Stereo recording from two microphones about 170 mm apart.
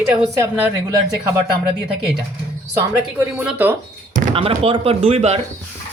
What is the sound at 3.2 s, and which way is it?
Speech, 10° right (ahead or behind).